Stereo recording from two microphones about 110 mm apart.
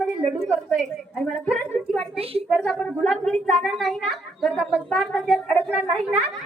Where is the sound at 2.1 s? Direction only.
60° right (ahead or behind).